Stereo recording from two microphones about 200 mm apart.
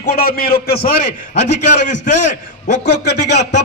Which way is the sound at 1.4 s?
35° left (ahead or behind).